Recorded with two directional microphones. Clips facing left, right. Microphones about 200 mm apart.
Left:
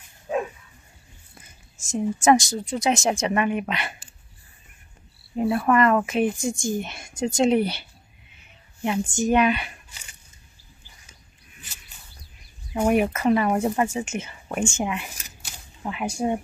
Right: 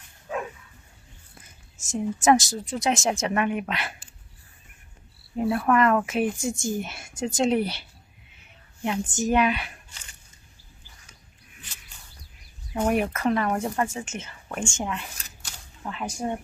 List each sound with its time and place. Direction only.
0.3 s dog: 20° left (ahead or behind)
1.9 s speech: centre (ahead or behind)
5.3 s speech: 10° left (ahead or behind)
8.8 s speech: centre (ahead or behind)
12.7 s speech: 10° left (ahead or behind)